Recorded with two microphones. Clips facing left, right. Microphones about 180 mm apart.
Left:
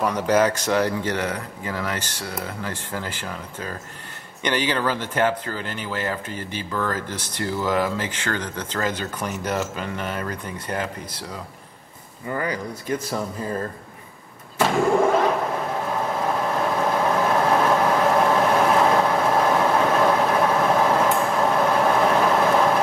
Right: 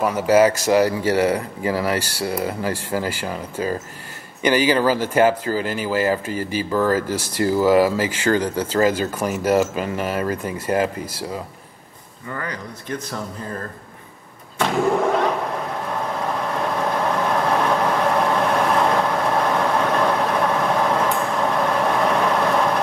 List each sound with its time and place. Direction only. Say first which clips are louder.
0.0 s speech: right 4 dB; 5° right (ahead or behind)
12.3 s speech: left 4 dB; 15° left (ahead or behind)
14.6 s vehicle: even; centre (ahead or behind)